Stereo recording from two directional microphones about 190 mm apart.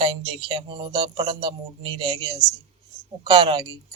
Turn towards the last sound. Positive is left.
turn(degrees=-25)  # may be behind; listen again after turning